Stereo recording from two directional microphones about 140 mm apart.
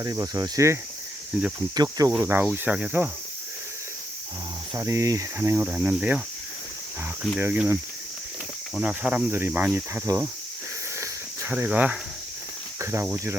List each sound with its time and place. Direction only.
0.0 s speech: 25° right (ahead or behind)
1.3 s speech: 5° right (ahead or behind)
1.7 s speech: 30° right (ahead or behind); by 3.1 s 10° right (ahead or behind)
4.7 s speech: 20° right (ahead or behind)
7.3 s speech: 10° right (ahead or behind)
11.0 s cricket: 10° right (ahead or behind)
12.8 s speech: 20° right (ahead or behind)